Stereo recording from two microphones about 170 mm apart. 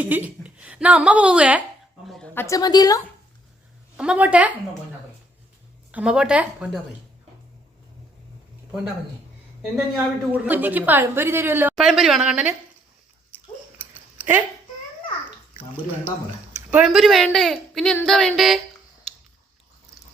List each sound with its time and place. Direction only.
0.0 s a woman's voice: 10° right (ahead or behind)
2.0 s a sound: centre (ahead or behind)
2.3 s a woman's voice: 15° left (ahead or behind)
3.9 s a woman's voice: 5° right (ahead or behind)
5.9 s a woman's voice: 5° right (ahead or behind)
9.6 s a woman's voice: 5° right (ahead or behind)
11.9 s speech: centre (ahead or behind)
13.3 s a sound: 10° right (ahead or behind)
16.7 s speech: centre (ahead or behind)